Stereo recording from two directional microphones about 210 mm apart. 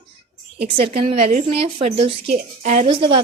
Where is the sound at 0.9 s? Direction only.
30° right (ahead or behind).